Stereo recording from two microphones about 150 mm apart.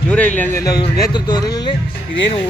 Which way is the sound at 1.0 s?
30° left (ahead or behind).